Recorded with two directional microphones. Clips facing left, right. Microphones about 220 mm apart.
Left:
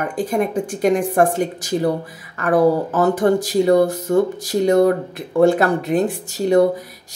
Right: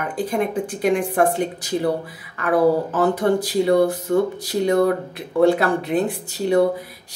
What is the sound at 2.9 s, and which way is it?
Speech, 45° left (ahead or behind).